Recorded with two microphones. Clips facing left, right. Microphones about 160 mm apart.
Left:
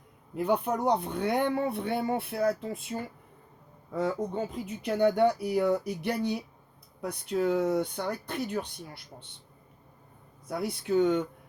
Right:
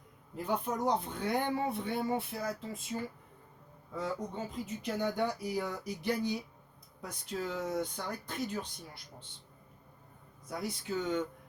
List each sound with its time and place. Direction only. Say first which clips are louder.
0.3 s speech: left 6 dB; 65° left (ahead or behind)
10.5 s speech: left 8 dB; 60° left (ahead or behind)